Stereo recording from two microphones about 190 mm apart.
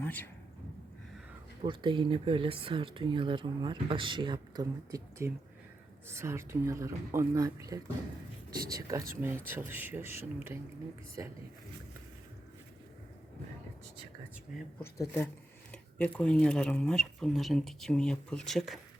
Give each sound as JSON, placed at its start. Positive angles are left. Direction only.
{"t": 0.0, "sound": "speech", "side_deg": 10}
{"t": 1.6, "sound": "speech", "side_deg": -25}
{"t": 14.8, "sound": "speech", "side_deg": 10}